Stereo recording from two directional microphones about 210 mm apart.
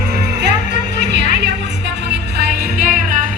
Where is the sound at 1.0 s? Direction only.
55° right (ahead or behind).